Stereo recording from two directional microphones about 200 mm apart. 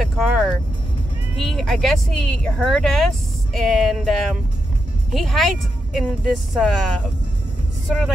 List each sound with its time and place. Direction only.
0.0 s speech: centre (ahead or behind)